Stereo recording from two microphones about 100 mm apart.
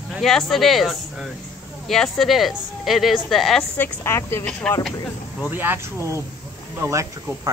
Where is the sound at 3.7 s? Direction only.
25° left (ahead or behind).